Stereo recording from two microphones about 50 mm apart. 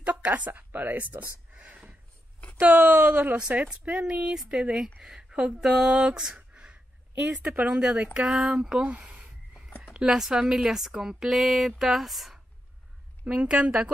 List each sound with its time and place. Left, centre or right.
0.0 s a woman's voice: right
1.5 s a sound: right
2.6 s a woman's voice: right
10.0 s a woman's voice: centre
13.3 s a woman's voice: centre